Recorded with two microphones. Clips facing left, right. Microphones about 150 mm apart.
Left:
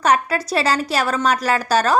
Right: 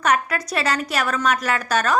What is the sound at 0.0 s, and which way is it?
A woman's voice, 30° left (ahead or behind).